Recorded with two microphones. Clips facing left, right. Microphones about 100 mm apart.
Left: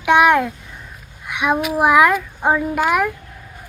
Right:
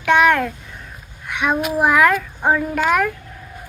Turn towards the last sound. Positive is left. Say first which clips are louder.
# even
turn(degrees=10)  # may be behind; listen again after turning